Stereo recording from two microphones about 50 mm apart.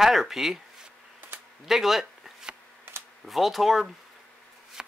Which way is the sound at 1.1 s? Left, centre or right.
Right.